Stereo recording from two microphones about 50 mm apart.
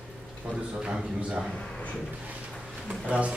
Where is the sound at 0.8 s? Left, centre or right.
Centre.